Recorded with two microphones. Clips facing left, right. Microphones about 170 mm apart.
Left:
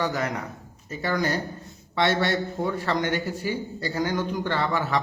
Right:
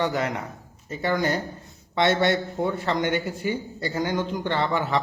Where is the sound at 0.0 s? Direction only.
25° right (ahead or behind).